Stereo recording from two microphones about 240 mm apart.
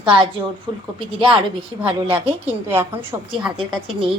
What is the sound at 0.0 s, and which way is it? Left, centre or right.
A woman's voice, right.